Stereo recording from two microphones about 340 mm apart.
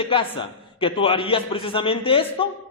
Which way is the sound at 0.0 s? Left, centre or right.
Centre.